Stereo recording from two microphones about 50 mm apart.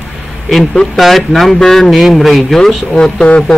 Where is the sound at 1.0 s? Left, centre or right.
Centre.